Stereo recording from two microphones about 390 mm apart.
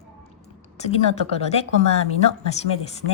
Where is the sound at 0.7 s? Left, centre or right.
Centre.